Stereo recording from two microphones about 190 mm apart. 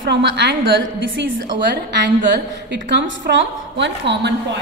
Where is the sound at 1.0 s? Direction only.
75° right (ahead or behind).